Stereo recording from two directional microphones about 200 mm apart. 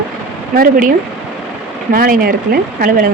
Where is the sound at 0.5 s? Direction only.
45° right (ahead or behind).